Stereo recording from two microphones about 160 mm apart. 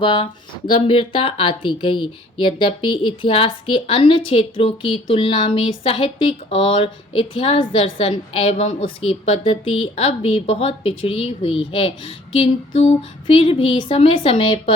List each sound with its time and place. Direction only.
0.0 s speech: 30° left (ahead or behind)